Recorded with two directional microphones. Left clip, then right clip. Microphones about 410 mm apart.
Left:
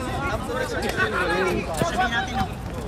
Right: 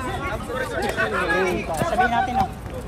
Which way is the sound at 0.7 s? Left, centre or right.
Centre.